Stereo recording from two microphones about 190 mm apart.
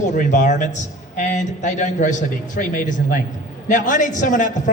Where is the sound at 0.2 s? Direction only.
40° left (ahead or behind).